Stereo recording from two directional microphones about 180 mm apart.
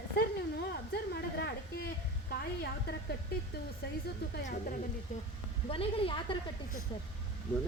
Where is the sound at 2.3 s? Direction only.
60° left (ahead or behind).